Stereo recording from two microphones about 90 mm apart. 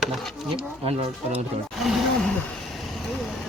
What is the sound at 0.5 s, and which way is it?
Speech, 90° right.